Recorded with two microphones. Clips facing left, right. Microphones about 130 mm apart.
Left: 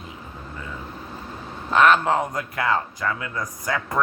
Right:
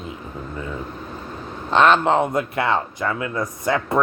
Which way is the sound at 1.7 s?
30° right (ahead or behind).